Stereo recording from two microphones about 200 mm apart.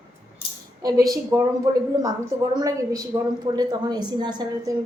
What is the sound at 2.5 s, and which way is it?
A woman's voice, 20° right (ahead or behind).